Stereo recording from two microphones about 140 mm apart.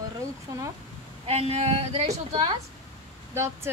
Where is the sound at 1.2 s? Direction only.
50° right (ahead or behind).